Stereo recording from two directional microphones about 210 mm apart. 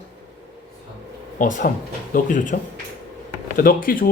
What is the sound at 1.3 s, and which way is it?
A man's voice, 40° left (ahead or behind).